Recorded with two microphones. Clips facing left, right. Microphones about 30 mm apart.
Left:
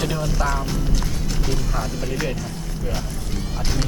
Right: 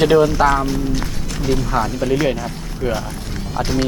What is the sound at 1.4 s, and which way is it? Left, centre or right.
Speech, centre.